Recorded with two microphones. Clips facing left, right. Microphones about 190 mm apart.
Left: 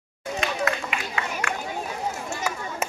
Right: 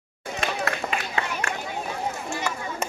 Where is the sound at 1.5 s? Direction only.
40° right (ahead or behind).